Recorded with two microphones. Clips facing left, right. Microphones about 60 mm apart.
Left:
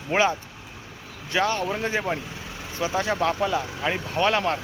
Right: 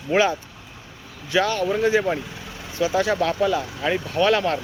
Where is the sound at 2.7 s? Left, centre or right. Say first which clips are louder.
Right 5 dB; left.